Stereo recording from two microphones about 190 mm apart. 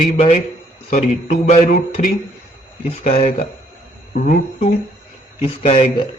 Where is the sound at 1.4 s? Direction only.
35° left (ahead or behind).